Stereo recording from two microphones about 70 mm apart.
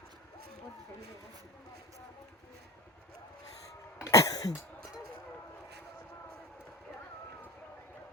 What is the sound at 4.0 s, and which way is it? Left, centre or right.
Throat clearing, left.